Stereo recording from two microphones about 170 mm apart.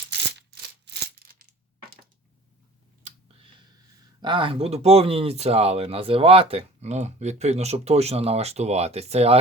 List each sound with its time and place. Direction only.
0.3 s music: 80° right
4.2 s speech: 30° right (ahead or behind)